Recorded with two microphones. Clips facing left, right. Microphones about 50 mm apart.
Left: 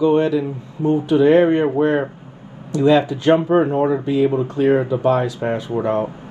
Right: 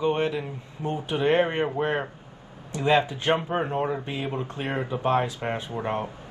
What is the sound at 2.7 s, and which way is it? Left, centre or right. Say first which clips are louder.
Speech: left 8 dB; right.